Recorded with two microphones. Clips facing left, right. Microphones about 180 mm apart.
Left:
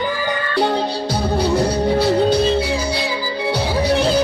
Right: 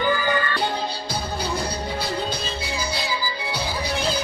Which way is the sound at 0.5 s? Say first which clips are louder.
Left 8 dB; 70° left (ahead or behind).